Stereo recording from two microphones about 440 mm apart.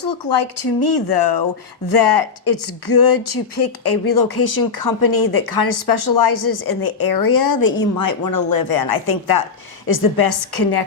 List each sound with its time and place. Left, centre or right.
0.0 s speech: left